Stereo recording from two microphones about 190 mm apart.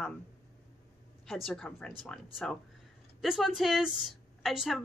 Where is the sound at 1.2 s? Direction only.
Centre (ahead or behind).